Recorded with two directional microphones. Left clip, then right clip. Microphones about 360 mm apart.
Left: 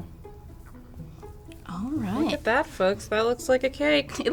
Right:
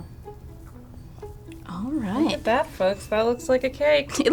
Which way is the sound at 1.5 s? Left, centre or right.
Centre.